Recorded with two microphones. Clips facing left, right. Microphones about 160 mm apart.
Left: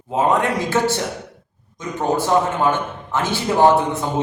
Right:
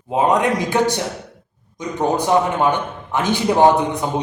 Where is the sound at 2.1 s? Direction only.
15° right (ahead or behind).